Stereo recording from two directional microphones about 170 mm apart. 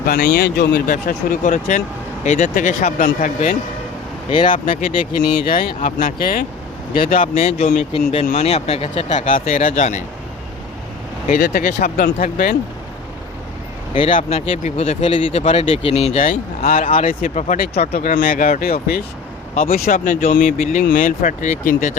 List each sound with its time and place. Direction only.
0.0 s speech: 60° left (ahead or behind)
4.3 s speech: 30° left (ahead or behind)
5.5 s speech: 55° left (ahead or behind); by 9.2 s 35° left (ahead or behind)
9.5 s speech: 50° left (ahead or behind)
11.3 s speech: 65° left (ahead or behind)
13.9 s speech: 30° left (ahead or behind)
16.6 s speech: 55° left (ahead or behind)